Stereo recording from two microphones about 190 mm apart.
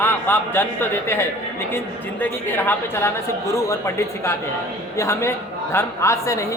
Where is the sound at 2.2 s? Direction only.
10° left (ahead or behind).